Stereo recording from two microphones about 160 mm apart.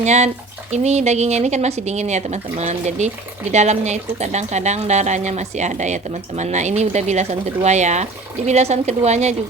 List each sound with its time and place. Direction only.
0.0 s speech: 45° right (ahead or behind)